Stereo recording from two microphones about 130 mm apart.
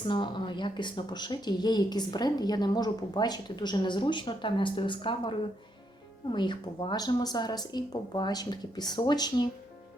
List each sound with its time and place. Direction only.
0.1 s speech: 35° left (ahead or behind)